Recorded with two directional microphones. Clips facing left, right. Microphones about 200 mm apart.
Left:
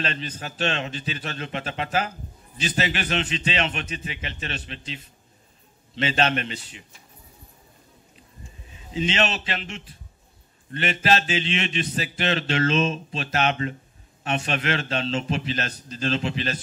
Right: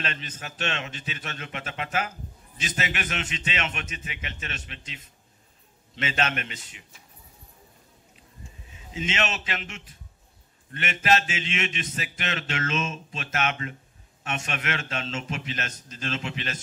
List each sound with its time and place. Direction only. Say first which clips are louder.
0.0 s a man's voice: left 5 dB; 35° left (ahead or behind)
8.9 s a man's voice: left 5 dB; 35° left (ahead or behind)